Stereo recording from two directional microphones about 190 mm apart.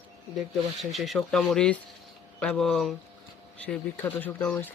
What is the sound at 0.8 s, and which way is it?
Speech, centre (ahead or behind).